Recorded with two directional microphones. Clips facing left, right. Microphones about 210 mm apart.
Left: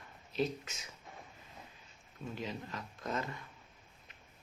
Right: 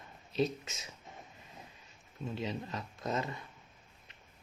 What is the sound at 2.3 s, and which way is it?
Speech, 25° right (ahead or behind).